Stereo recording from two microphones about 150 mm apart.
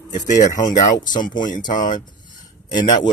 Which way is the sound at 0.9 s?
30° left (ahead or behind).